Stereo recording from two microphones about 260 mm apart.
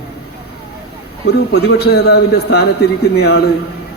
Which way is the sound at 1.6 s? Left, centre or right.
Left.